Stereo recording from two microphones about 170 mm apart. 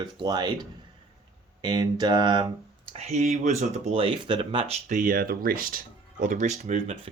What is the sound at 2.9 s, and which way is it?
Speech, 40° right (ahead or behind).